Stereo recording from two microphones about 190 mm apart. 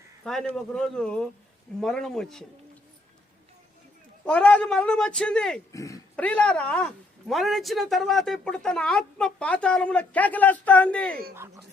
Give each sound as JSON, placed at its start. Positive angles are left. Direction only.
{"t": 0.5, "sound": "speech", "side_deg": 5}
{"t": 4.3, "sound": "speech", "side_deg": 5}
{"t": 5.7, "sound": "oink", "side_deg": 15}
{"t": 6.1, "sound": "speech", "side_deg": 5}